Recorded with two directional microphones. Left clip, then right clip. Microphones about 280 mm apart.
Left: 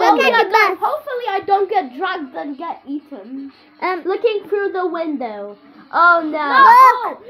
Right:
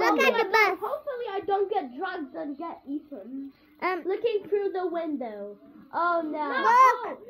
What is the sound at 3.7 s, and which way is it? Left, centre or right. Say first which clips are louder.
Speech: left 8 dB; centre.